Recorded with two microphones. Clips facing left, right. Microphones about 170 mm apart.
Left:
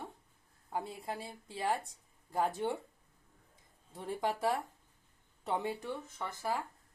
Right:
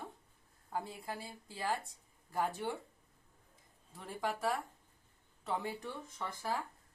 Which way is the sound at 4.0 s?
25° left (ahead or behind).